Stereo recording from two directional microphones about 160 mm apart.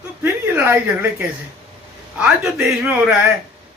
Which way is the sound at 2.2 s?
10° right (ahead or behind).